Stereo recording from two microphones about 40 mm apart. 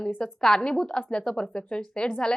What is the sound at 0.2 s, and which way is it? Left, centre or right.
A woman's voice, centre.